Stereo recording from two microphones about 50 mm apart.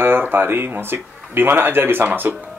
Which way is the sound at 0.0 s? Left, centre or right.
Right.